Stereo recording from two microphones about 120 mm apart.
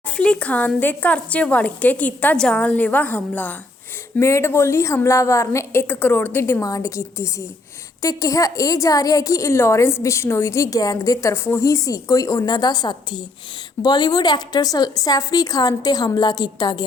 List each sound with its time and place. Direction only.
0.2 s a woman's voice: 10° left (ahead or behind); by 16.8 s 35° left (ahead or behind)